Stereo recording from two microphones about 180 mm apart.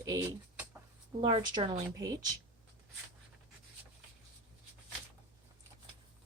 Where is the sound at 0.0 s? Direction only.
20° right (ahead or behind).